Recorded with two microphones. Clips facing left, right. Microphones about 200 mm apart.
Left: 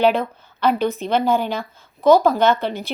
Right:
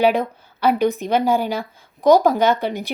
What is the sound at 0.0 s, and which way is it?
A woman's voice, 10° right (ahead or behind).